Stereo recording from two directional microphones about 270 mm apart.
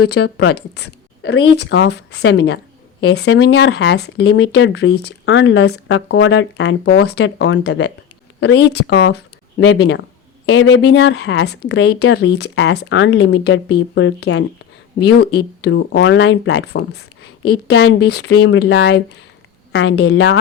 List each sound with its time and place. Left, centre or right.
0.0 s speech: left